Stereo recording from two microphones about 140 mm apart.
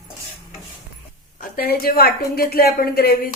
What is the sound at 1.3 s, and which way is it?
Speech, 90° left.